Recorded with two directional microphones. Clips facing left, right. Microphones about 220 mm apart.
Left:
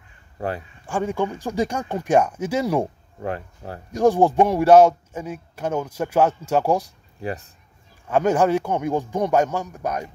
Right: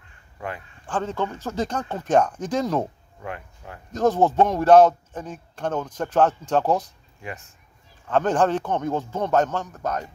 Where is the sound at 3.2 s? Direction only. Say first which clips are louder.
Left 6 dB; 35° left (ahead or behind).